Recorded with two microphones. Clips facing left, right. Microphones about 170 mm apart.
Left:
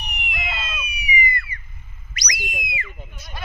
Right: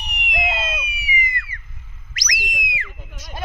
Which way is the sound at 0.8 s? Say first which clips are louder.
Left 3 dB; 90° right.